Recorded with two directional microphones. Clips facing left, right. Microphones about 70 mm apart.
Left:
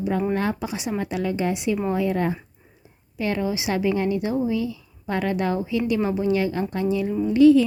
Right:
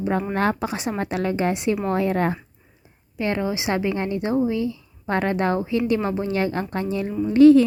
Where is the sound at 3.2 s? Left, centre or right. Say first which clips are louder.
Right 1 dB; right.